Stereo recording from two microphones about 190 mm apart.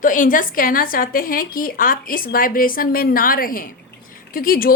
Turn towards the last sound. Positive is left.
turn(degrees=50)  # may be behind; listen again after turning